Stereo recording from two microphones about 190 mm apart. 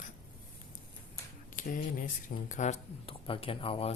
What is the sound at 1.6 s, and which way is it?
Speech, 45° left (ahead or behind).